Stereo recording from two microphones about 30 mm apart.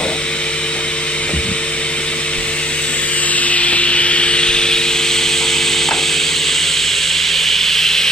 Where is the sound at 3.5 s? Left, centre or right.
Left.